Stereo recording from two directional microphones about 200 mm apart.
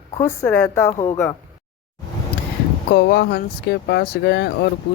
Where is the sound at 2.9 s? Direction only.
55° left (ahead or behind).